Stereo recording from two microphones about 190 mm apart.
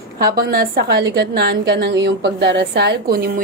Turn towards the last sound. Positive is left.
turn(degrees=-50)  # may be behind; listen again after turning